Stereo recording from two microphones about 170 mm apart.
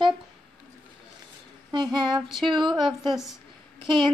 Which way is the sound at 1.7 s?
25° right (ahead or behind).